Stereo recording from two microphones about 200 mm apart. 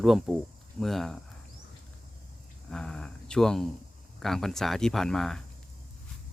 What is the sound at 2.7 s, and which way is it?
Speech, 5° left (ahead or behind).